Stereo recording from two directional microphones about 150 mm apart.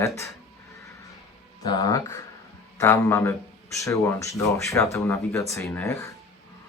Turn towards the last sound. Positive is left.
turn(degrees=20)  # may be behind; listen again after turning